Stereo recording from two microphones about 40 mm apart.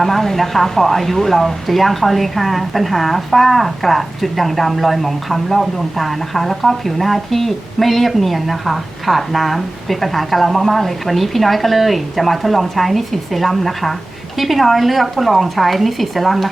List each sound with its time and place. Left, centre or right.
0.0 s speech: centre